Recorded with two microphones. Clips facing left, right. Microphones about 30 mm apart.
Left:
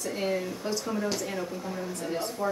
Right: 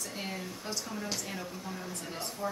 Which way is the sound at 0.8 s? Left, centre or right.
Centre.